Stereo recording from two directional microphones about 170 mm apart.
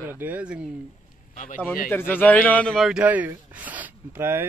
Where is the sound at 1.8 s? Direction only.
10° left (ahead or behind); by 4.4 s 15° right (ahead or behind).